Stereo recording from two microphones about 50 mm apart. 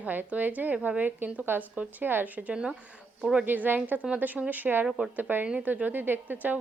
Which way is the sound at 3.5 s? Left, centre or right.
Right.